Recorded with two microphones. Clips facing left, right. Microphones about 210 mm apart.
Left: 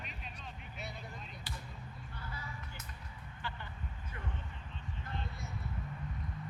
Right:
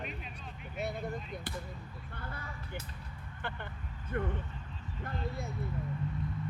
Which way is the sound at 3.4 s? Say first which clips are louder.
Right 4 dB; 55° right (ahead or behind).